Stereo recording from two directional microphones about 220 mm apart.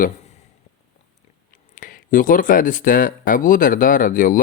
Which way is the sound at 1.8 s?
40° left (ahead or behind).